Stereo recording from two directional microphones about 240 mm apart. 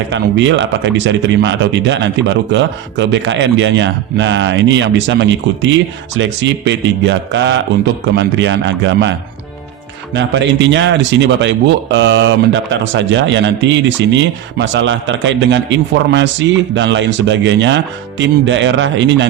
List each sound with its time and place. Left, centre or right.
0.1 s speech: right
10.2 s speech: right